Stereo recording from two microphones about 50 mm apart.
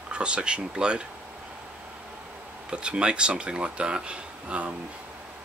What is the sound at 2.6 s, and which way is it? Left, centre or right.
Speech, centre.